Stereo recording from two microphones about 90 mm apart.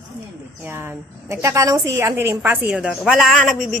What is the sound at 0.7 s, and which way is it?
Speech, 25° right (ahead or behind).